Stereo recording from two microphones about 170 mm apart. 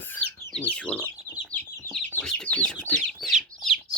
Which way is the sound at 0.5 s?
5° left (ahead or behind).